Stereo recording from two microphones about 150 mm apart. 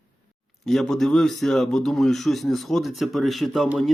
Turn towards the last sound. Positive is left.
turn(degrees=0)  # may be behind; listen again after turning